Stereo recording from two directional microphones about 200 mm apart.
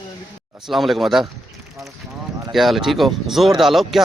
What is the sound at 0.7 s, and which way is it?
Speech, centre (ahead or behind).